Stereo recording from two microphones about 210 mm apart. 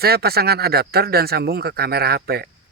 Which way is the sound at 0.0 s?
50° right (ahead or behind).